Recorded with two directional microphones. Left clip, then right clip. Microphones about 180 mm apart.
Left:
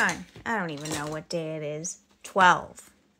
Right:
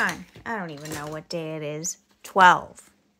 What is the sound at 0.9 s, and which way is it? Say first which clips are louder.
Speech: right 1 dB; 5° left (ahead or behind).